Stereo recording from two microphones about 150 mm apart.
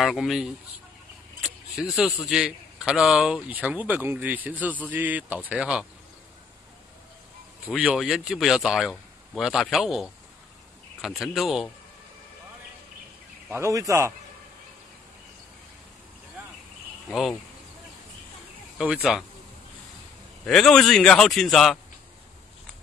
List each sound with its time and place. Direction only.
0.0 s a man's voice: centre (ahead or behind)
7.6 s speech: 5° right (ahead or behind)
13.5 s speech: 20° right (ahead or behind)
17.1 s speech: centre (ahead or behind)
18.8 s speech: 5° right (ahead or behind)
20.4 s speech: centre (ahead or behind)